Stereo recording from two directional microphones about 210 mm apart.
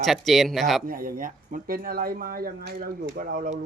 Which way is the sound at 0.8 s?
40° right (ahead or behind).